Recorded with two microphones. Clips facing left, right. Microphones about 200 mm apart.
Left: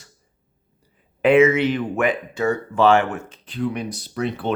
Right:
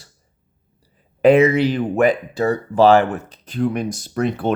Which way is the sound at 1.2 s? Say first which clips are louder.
Right 2 dB; 35° right (ahead or behind).